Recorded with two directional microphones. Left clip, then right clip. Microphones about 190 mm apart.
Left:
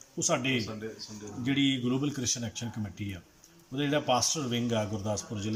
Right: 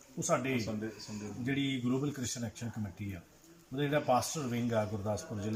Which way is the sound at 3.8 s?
Centre (ahead or behind).